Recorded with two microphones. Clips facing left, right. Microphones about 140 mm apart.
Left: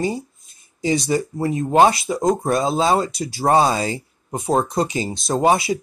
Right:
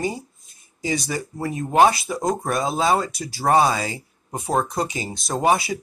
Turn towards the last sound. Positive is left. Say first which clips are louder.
# left 3 dB
turn(degrees=25)  # may be behind; listen again after turning